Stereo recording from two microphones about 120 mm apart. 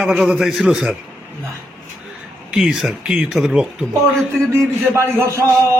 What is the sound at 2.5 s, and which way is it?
Speech, centre (ahead or behind).